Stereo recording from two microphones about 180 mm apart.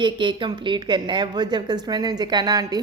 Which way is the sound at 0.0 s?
25° right (ahead or behind).